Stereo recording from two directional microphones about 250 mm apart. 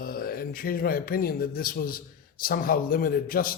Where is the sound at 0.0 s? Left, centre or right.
Left.